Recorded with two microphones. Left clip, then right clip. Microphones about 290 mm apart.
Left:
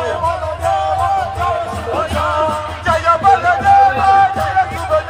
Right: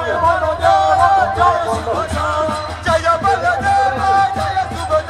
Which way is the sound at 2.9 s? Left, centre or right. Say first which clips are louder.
Left 3 dB; centre.